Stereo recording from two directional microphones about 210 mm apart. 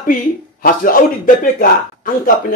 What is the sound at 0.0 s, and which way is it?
Speech, 40° left (ahead or behind).